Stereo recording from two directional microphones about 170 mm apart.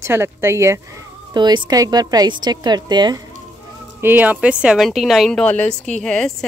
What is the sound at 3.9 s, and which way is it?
Speech, 10° right (ahead or behind).